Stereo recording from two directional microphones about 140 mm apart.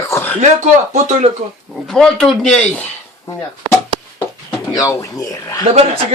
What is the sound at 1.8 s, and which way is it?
Speech, 5° left (ahead or behind).